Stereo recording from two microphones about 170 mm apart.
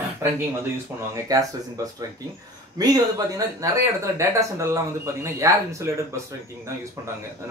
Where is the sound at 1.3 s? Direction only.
20° right (ahead or behind).